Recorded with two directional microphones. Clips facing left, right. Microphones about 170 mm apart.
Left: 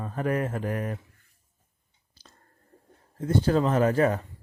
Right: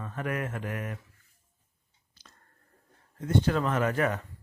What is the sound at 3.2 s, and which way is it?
Speech, 30° left (ahead or behind).